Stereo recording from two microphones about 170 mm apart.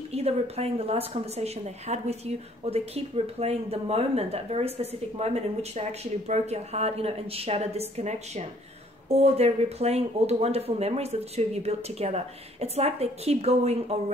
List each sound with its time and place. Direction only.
0.1 s a woman's voice: 40° right (ahead or behind)